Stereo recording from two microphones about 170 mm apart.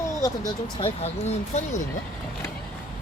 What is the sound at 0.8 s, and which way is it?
Speech, 35° left (ahead or behind).